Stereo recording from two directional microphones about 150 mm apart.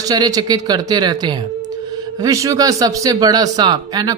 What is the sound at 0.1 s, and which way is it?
Speech, 25° right (ahead or behind).